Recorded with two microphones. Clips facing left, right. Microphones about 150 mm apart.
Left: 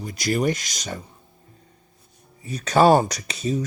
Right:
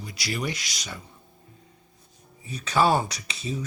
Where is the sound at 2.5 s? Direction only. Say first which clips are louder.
Left 6 dB; 45° left (ahead or behind).